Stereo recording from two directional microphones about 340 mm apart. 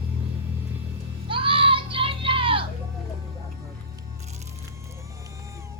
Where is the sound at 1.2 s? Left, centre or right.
Centre.